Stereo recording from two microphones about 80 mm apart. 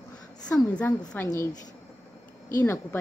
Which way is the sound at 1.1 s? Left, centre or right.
Left.